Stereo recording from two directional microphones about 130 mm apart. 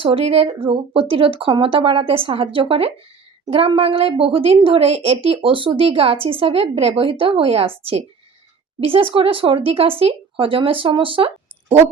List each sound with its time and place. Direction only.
0.0 s a woman's voice: 45° right (ahead or behind)
8.8 s a woman's voice: 45° right (ahead or behind)